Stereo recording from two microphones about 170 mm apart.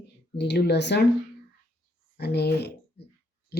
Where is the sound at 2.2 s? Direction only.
75° left (ahead or behind).